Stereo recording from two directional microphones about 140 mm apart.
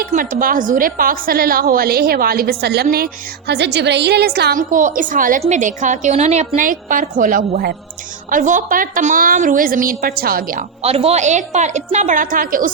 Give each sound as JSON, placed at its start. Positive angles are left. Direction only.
{"t": 0.0, "sound": "a woman's voice", "side_deg": -75}
{"t": 4.3, "sound": "a woman's voice", "side_deg": -75}
{"t": 5.4, "sound": "a woman's voice", "side_deg": -60}
{"t": 10.8, "sound": "a woman's voice", "side_deg": -45}